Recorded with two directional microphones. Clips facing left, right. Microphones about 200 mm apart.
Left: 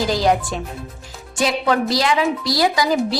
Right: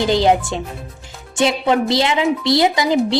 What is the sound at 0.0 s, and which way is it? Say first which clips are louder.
A woman's voice: right 3 dB; 25° right (ahead or behind).